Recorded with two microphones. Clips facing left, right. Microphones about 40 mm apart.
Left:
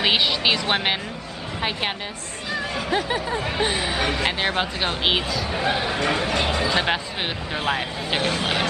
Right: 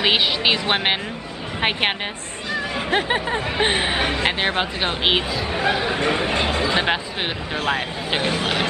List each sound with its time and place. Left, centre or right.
0.0 s speech: centre
1.6 s speech: right
4.0 s speech: centre
6.0 s speech: right
7.5 s speech: centre
8.1 s speech: centre